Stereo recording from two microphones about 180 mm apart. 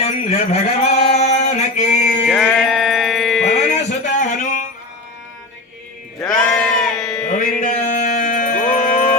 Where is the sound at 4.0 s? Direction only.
45° left (ahead or behind).